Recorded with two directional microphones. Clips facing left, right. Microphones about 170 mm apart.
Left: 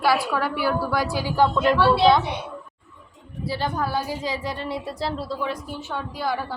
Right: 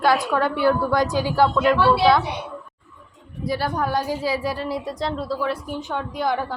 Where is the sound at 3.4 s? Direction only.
10° right (ahead or behind); by 5.3 s 5° left (ahead or behind).